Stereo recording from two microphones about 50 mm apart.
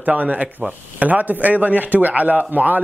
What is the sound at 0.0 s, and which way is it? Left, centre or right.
Speech, right.